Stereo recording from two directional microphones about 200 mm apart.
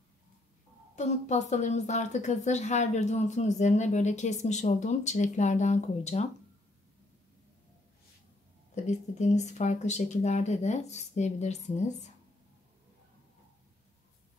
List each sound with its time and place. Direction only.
0.9 s a woman's voice: 35° left (ahead or behind)
8.7 s a woman's voice: 35° left (ahead or behind)